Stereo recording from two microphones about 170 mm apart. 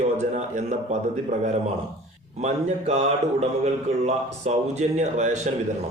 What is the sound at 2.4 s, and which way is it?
A man's voice, 40° right (ahead or behind).